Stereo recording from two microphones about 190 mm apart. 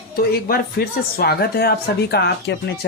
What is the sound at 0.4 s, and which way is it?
Speech, 50° left (ahead or behind).